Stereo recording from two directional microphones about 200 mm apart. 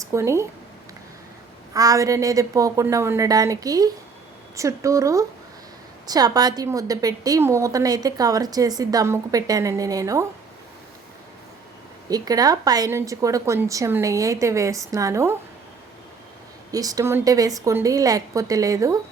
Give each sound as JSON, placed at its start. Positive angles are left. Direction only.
{"t": 0.0, "sound": "speech", "side_deg": -15}
{"t": 1.7, "sound": "a woman's voice", "side_deg": -15}
{"t": 12.0, "sound": "a woman's voice", "side_deg": -20}
{"t": 16.7, "sound": "a woman's voice", "side_deg": -15}